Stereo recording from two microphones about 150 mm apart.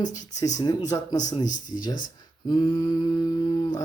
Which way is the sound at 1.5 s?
60° left (ahead or behind).